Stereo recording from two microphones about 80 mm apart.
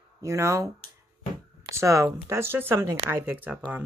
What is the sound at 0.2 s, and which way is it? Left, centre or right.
Speech, right.